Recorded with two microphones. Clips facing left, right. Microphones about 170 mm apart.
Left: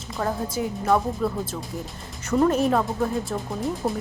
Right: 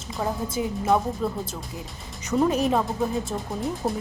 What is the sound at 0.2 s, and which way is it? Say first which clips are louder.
Speech: left 1 dB; 10° right (ahead or behind).